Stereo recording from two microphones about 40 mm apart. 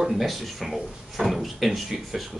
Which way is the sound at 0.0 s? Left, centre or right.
Centre.